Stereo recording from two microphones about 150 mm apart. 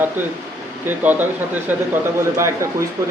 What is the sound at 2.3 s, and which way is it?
Speech, 20° right (ahead or behind).